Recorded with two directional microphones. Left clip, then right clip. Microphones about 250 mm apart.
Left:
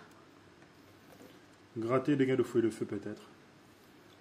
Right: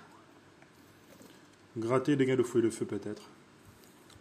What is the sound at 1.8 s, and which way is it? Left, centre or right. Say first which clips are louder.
Speech: right 1 dB; centre.